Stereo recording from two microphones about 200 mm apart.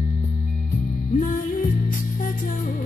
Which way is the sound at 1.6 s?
40° left (ahead or behind).